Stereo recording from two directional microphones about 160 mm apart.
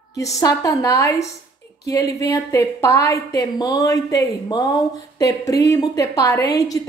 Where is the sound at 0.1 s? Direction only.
20° left (ahead or behind).